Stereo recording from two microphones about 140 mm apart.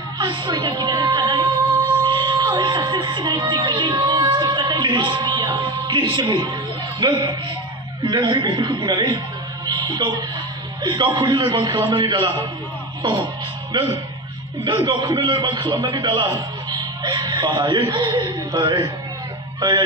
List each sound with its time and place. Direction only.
0.2 s speech: 35° right (ahead or behind)
2.0 s music: 35° right (ahead or behind)
7.0 s a man's voice: 35° right (ahead or behind)
9.7 s a sound: 35° right (ahead or behind)
10.8 s a man's voice: 35° right (ahead or behind)
13.0 s music: 35° right (ahead or behind)
14.9 s a man's voice: 35° right (ahead or behind)